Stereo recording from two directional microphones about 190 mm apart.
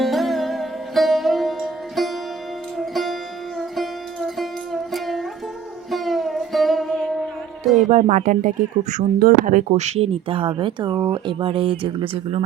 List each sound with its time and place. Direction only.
0.0 s music: centre (ahead or behind)
7.9 s speech: 35° right (ahead or behind)
9.6 s speech: 35° right (ahead or behind)